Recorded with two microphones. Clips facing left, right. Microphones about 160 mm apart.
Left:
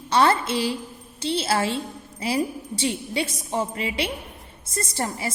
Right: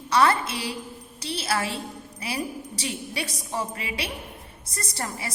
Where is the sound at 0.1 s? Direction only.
25° left (ahead or behind).